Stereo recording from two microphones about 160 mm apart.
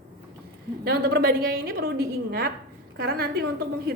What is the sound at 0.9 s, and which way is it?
A woman's voice, 70° right (ahead or behind).